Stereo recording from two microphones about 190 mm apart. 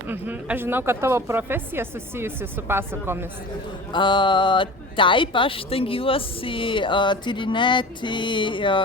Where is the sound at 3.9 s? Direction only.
25° left (ahead or behind).